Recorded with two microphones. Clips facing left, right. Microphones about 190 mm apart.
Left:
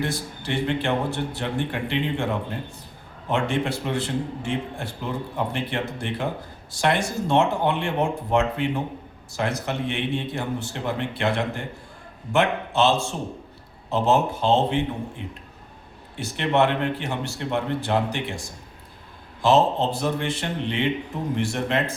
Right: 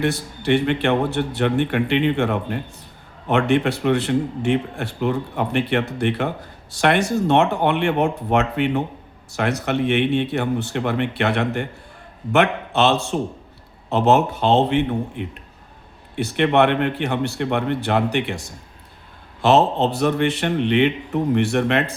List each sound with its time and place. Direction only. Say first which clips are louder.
0.0 s a man's voice: right 6 dB; 65° right (ahead or behind)